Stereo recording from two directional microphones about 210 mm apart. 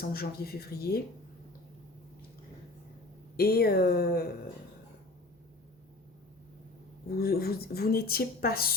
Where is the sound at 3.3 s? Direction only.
50° left (ahead or behind).